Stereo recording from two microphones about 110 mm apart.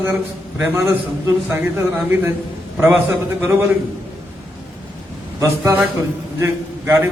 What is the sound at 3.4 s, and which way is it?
Speech, 20° right (ahead or behind).